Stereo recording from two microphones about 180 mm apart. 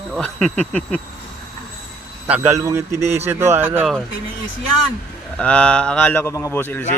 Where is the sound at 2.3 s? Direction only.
10° right (ahead or behind).